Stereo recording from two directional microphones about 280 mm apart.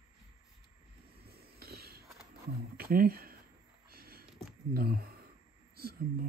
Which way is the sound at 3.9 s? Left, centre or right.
Right.